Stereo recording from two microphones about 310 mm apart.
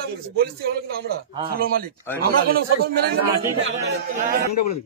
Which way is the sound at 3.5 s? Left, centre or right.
Right.